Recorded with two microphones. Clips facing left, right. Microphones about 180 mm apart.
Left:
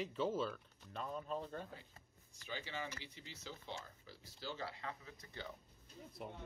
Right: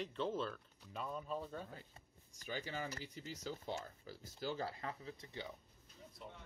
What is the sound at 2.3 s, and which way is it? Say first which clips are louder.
Speech: right 2 dB; 45° right (ahead or behind).